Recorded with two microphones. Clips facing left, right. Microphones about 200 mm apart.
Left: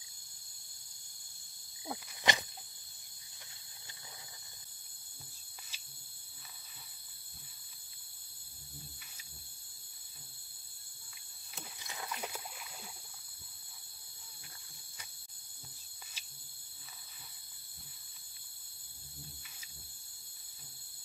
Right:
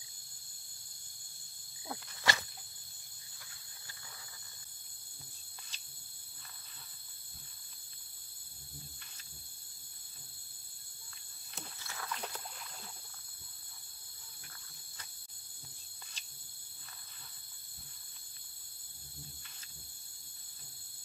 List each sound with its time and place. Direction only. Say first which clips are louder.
1.9 s cricket: left 2 dB; 15° left (ahead or behind)
5.7 s cricket: even; 10° left (ahead or behind)
11.8 s a sound: left 1 dB; 15° left (ahead or behind)
16.2 s cricket: even; 10° left (ahead or behind)